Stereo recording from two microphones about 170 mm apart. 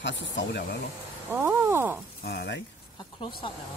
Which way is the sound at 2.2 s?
80° left.